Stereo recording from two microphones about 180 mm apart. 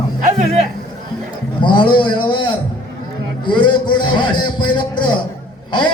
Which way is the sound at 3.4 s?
25° left (ahead or behind).